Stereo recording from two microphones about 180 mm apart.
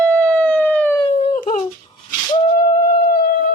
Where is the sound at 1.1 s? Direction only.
50° left (ahead or behind).